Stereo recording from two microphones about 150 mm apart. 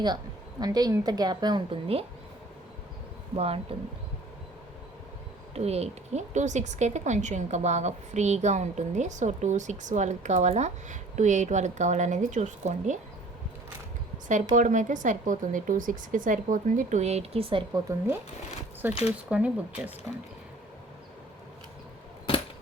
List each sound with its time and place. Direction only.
0.6 s a woman's voice: 25° right (ahead or behind)
3.3 s speech: 40° right (ahead or behind)
5.5 s a woman's voice: 45° right (ahead or behind)
14.5 s speech: 55° right (ahead or behind); by 17.6 s 40° right (ahead or behind)
17.7 s a woman's voice: 20° right (ahead or behind)
18.8 s speech: 10° right (ahead or behind)
22.3 s a sound: 35° left (ahead or behind)